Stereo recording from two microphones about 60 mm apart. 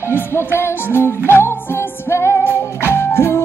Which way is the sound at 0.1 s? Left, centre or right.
Left.